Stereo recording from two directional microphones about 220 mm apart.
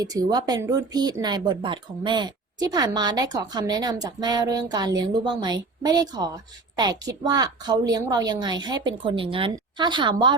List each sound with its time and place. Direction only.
0.0 s a woman's voice: 15° right (ahead or behind)